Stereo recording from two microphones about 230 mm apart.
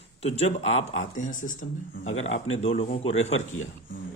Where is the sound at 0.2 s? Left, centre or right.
Left.